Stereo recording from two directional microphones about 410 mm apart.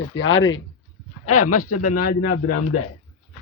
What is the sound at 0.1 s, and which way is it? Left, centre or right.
A man's voice, left.